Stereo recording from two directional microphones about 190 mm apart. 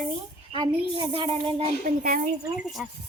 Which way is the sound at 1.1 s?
30° right (ahead or behind).